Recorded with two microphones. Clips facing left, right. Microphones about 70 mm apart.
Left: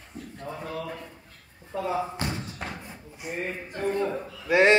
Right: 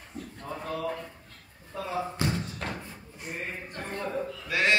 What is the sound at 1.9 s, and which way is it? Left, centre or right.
Music, centre.